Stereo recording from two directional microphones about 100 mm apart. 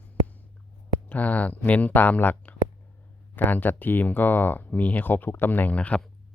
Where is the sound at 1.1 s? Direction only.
15° left (ahead or behind).